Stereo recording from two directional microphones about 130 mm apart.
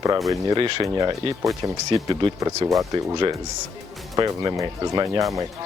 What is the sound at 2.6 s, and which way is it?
Speech, 35° right (ahead or behind).